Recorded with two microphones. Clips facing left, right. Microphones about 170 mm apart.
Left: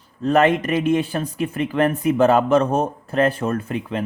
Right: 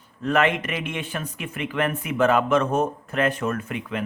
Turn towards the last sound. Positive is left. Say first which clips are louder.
# left 4 dB
turn(degrees=35)  # may be behind; listen again after turning